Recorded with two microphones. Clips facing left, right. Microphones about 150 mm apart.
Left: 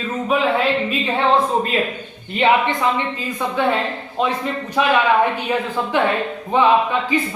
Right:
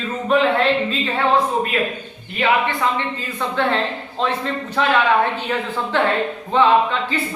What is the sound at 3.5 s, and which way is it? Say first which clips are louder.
Speech: even; 10° left (ahead or behind).